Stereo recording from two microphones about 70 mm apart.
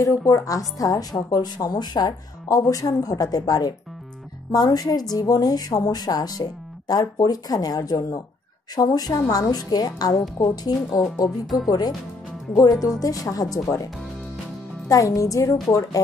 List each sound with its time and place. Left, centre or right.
0.0 s speech: left
2.4 s a woman's voice: left
11.2 s speech: centre
12.5 s speech: left
14.9 s speech: left